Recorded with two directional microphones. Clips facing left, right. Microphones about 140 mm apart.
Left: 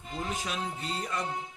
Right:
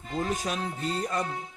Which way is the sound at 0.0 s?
45° right (ahead or behind).